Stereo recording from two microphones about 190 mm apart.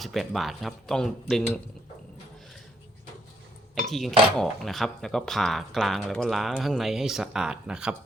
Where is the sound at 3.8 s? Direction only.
Centre (ahead or behind).